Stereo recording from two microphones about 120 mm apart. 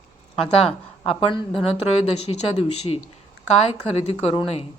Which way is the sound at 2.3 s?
60° left (ahead or behind).